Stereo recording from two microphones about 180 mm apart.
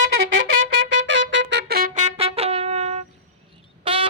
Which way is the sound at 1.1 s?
90° right.